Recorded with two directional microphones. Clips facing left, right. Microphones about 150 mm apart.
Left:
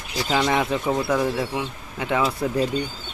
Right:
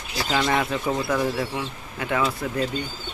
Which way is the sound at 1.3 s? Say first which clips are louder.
Left 2 dB; 20° left (ahead or behind).